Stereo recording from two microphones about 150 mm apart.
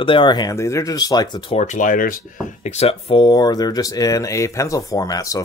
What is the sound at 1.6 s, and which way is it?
Speech, 55° left (ahead or behind).